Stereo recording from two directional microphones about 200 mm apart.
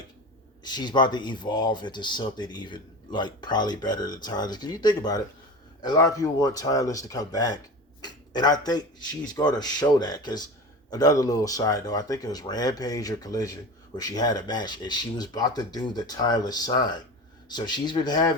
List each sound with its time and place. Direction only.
0.6 s speech: 20° left (ahead or behind)